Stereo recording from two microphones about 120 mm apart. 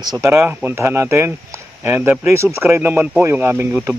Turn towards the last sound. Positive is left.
turn(degrees=-20)  # may be behind; listen again after turning